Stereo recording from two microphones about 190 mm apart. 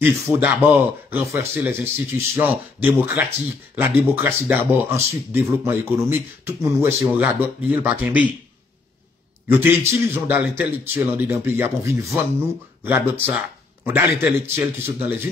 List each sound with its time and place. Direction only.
0.0 s speech: 10° right (ahead or behind)
9.5 s speech: 10° right (ahead or behind)